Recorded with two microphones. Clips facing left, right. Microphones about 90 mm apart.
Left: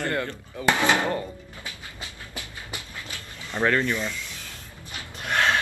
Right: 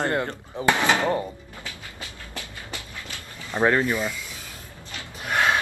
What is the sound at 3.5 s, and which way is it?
Speech, 20° right (ahead or behind).